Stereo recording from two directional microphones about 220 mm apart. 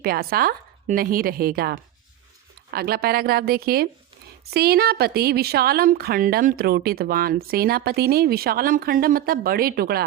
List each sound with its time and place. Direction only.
0.0 s a woman's voice: 45° right (ahead or behind)